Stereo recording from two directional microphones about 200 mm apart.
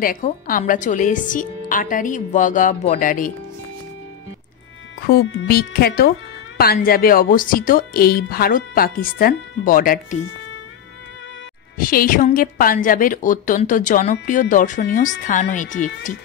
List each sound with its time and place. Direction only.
0.0 s a woman's voice: 45° left (ahead or behind)
5.2 s a woman's voice: 60° left (ahead or behind); by 9.9 s 45° left (ahead or behind)
11.8 s a woman's voice: 45° left (ahead or behind)